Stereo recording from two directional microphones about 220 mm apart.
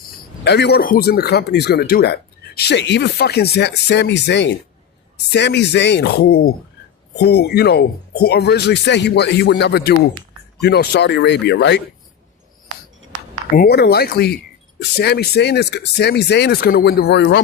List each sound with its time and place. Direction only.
0.4 s speech: 50° left (ahead or behind)
13.6 s speech: 45° left (ahead or behind)